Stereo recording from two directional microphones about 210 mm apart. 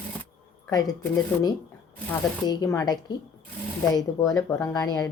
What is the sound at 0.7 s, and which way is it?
Speech, 15° left (ahead or behind).